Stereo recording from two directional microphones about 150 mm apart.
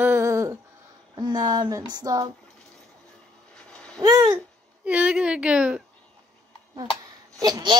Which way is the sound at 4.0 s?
25° right (ahead or behind).